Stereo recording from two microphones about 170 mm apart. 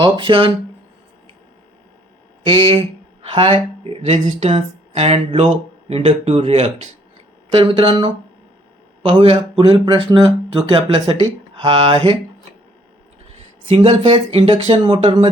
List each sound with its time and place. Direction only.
0.0 s speech: 30° right (ahead or behind)
2.4 s speech: 25° right (ahead or behind)
13.7 s speech: 35° right (ahead or behind)